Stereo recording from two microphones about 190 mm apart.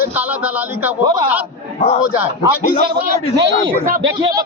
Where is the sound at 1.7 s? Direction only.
35° left (ahead or behind).